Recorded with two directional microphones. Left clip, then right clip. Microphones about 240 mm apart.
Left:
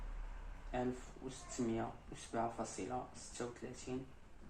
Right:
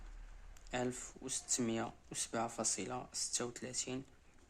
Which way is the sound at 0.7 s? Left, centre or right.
Right.